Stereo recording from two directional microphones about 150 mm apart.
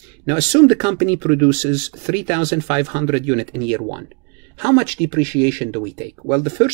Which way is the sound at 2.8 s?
15° right (ahead or behind).